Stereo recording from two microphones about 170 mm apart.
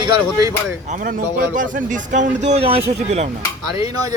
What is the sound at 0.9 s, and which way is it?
Speech, 55° right (ahead or behind).